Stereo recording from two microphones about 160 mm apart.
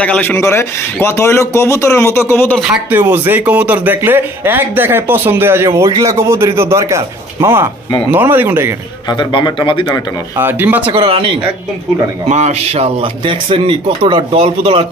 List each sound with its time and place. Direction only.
0.0 s speech: 10° left (ahead or behind)
2.6 s speech: 5° right (ahead or behind)
9.1 s speech: 30° left (ahead or behind)
10.4 s speech: 10° right (ahead or behind)
10.9 s speech: 35° right (ahead or behind)
12.3 s speech: 45° right (ahead or behind)